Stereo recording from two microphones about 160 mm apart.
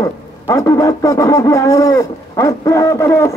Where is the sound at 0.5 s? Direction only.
20° left (ahead or behind).